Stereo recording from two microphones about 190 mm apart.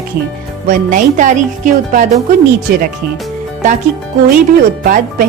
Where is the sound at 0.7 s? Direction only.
45° right (ahead or behind).